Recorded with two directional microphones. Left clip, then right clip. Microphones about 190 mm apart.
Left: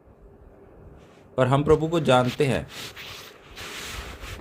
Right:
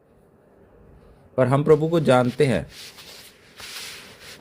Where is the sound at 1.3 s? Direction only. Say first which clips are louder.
Right 2 dB; 25° right (ahead or behind).